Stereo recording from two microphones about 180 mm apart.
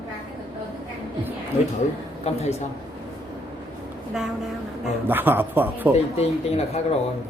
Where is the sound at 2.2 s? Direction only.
35° left (ahead or behind).